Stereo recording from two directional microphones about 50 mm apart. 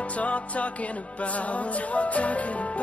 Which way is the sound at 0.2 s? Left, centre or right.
Left.